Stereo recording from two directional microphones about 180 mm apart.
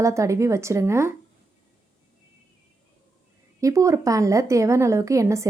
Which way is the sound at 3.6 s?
20° right (ahead or behind).